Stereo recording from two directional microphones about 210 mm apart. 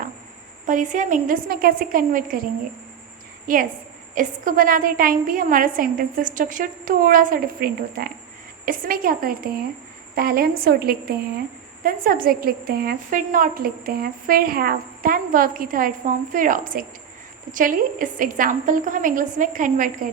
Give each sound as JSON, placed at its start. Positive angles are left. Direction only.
{"t": 0.7, "sound": "a woman's voice", "side_deg": -35}